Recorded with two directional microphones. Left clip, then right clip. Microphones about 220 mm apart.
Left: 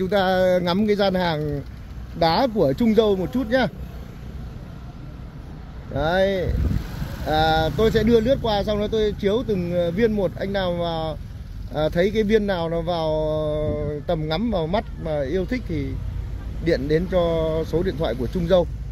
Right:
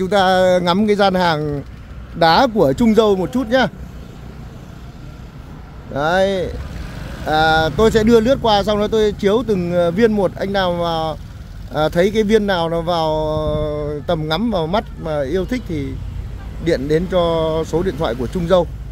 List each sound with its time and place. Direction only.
0.0 s speech: 10° right (ahead or behind)
5.9 s speech: 10° right (ahead or behind)